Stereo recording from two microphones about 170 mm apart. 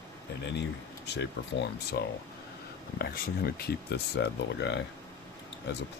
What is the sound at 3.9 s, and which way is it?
Speech, 80° left.